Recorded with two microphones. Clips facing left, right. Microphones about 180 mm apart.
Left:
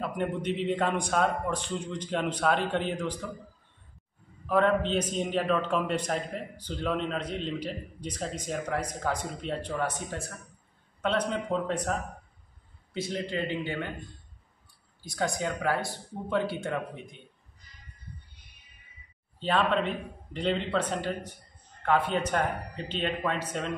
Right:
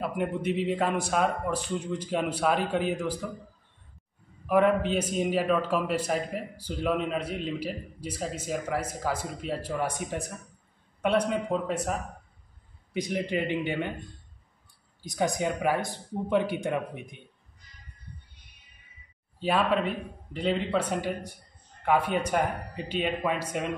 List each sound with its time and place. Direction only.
0.0 s a man's voice: 10° right (ahead or behind)
4.5 s a man's voice: 10° right (ahead or behind)
15.0 s a man's voice: 15° right (ahead or behind)
19.4 s a man's voice: 10° right (ahead or behind)